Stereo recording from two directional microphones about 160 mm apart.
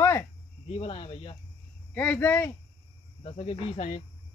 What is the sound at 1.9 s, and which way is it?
Speech, 10° left (ahead or behind).